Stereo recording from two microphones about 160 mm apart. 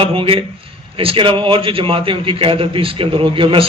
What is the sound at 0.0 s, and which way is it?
A man's voice, 35° right (ahead or behind).